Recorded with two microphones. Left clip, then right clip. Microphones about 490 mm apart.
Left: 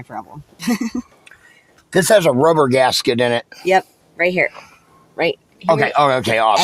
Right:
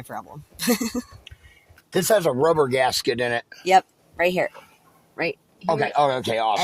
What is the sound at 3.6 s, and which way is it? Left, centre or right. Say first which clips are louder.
Speech: even; right.